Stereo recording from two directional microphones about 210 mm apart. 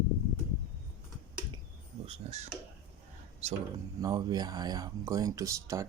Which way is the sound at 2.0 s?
30° right (ahead or behind).